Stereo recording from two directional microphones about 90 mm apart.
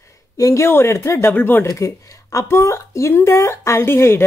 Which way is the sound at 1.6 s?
35° left (ahead or behind).